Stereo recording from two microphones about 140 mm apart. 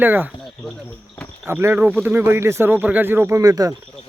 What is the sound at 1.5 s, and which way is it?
Speech, 15° right (ahead or behind).